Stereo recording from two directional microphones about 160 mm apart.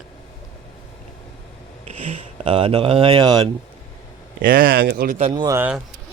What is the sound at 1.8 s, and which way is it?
Speech, 40° right (ahead or behind).